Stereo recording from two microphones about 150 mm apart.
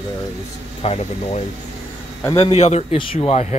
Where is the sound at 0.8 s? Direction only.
45° left (ahead or behind).